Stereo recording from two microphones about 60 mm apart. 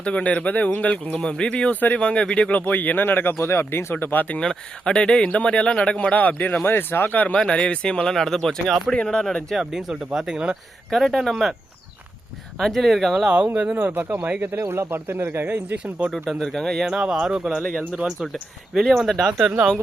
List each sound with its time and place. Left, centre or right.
0.0 s speech: left
2.5 s speech: left
4.0 s speech: left
4.4 s speech: centre
6.7 s speech: left
7.3 s speech: centre
9.6 s speech: centre
12.5 s speech: centre
13.7 s speech: right
14.7 s speech: right
15.4 s speech: right
16.1 s speech: centre
16.8 s speech: centre
18.7 s speech: centre